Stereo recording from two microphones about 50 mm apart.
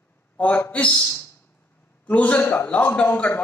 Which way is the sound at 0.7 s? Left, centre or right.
Left.